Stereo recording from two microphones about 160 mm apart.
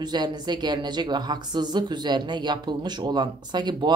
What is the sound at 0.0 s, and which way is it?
Speech, 25° right (ahead or behind).